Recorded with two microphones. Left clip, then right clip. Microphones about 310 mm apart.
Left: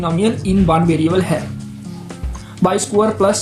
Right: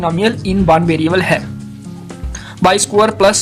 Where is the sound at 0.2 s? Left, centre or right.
Right.